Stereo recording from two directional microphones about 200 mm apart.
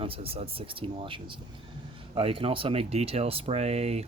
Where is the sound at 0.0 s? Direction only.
30° right (ahead or behind).